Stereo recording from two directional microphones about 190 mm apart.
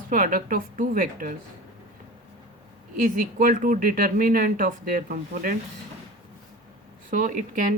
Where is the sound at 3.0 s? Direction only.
45° right (ahead or behind).